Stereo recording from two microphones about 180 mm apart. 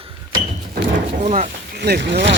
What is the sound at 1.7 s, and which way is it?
Speech, 60° right (ahead or behind).